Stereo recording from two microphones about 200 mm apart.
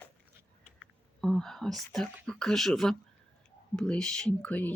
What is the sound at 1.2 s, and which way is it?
Speech, centre (ahead or behind).